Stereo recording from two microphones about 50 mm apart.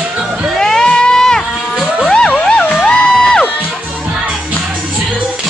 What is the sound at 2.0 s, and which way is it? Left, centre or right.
Music, centre.